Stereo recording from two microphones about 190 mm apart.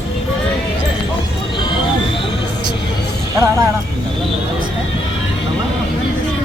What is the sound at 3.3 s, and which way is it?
Speech, 15° right (ahead or behind).